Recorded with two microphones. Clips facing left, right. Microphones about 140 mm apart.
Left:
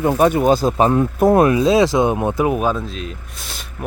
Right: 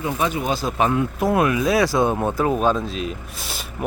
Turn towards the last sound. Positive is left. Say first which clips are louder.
# right 2 dB
turn(degrees=-5)  # may be behind; listen again after turning